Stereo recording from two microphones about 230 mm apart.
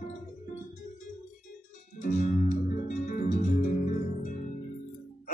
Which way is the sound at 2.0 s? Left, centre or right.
Left.